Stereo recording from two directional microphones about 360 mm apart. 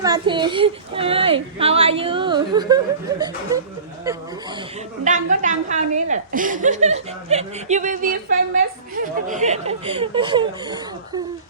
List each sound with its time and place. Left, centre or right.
0.0 s speech: centre
5.0 s a woman's voice: right